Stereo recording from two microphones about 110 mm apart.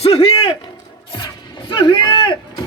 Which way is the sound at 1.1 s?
50° left (ahead or behind).